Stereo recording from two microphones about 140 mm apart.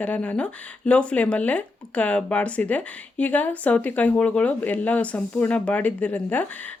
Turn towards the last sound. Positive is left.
turn(degrees=10)  # may be behind; listen again after turning